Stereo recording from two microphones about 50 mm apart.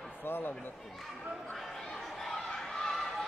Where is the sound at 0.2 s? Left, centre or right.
Left.